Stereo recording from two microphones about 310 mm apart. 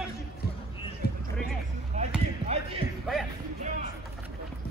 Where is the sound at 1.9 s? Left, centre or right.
Right.